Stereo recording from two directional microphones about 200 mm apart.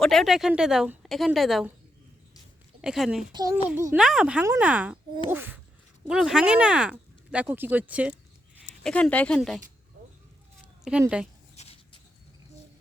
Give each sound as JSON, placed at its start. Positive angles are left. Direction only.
{"t": 0.0, "sound": "speech", "side_deg": 0}
{"t": 2.8, "sound": "speech", "side_deg": 0}
{"t": 3.3, "sound": "speech", "side_deg": -15}
{"t": 8.8, "sound": "speech", "side_deg": 5}
{"t": 11.0, "sound": "speech", "side_deg": -5}
{"t": 11.5, "sound": "a sound", "side_deg": 30}